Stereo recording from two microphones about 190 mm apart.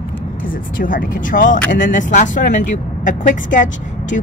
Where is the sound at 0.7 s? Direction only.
45° left (ahead or behind).